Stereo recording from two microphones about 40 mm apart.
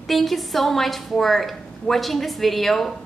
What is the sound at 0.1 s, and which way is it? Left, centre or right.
A woman's voice, centre.